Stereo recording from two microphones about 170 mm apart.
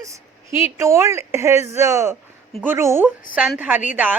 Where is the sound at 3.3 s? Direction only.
5° right (ahead or behind).